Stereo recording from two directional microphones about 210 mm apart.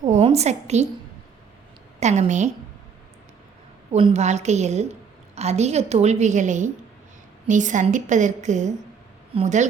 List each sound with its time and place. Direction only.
0.0 s a sound: 30° right (ahead or behind)
2.0 s a woman's voice: 35° right (ahead or behind)
3.9 s a woman's voice: 30° right (ahead or behind)